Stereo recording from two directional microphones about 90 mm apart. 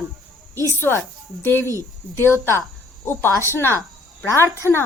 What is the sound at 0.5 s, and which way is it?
Speech, 35° right (ahead or behind).